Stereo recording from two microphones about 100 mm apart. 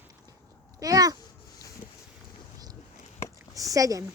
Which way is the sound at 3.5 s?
35° right (ahead or behind).